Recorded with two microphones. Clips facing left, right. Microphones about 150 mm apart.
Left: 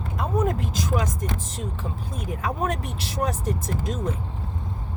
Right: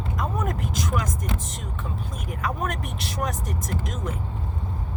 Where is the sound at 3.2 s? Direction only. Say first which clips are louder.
Left 5 dB; 30° left (ahead or behind).